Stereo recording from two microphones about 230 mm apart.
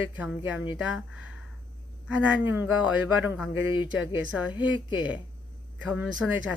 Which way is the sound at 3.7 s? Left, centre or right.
Left.